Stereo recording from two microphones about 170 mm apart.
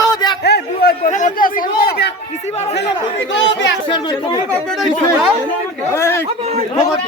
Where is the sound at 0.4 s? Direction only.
70° left (ahead or behind).